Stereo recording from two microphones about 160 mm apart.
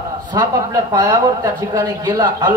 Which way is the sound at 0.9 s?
25° right (ahead or behind).